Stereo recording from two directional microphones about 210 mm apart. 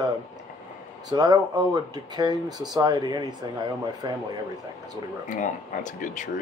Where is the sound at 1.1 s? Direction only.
20° right (ahead or behind).